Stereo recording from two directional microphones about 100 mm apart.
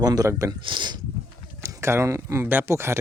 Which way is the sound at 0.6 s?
50° right (ahead or behind).